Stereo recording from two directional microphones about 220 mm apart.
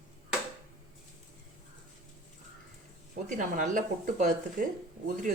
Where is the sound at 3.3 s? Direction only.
35° right (ahead or behind).